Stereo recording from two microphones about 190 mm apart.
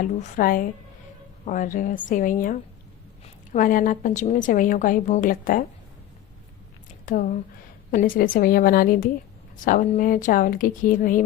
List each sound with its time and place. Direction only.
0.0 s a woman's voice: 45° left (ahead or behind)
7.0 s a woman's voice: 45° left (ahead or behind)